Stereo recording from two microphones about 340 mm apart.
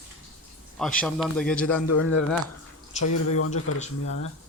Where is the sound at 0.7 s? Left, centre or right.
Centre.